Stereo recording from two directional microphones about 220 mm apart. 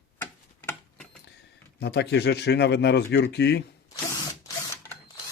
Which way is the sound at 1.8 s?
50° left (ahead or behind).